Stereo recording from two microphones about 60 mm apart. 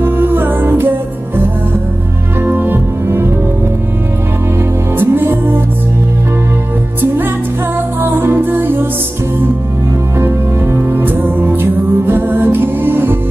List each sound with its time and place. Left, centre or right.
0.0 s music: right
2.4 s music: right
4.9 s music: right
8.0 s music: right
10.1 s music: right